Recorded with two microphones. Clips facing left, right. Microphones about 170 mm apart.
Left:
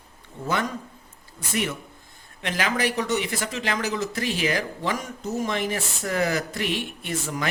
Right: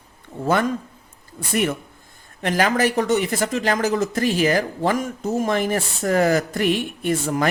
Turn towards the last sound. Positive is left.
turn(degrees=-50)  # may be behind; listen again after turning